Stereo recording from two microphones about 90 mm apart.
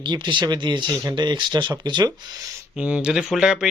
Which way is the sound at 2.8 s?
15° right (ahead or behind).